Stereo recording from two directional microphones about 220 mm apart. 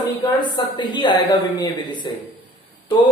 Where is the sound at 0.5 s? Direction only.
20° left (ahead or behind).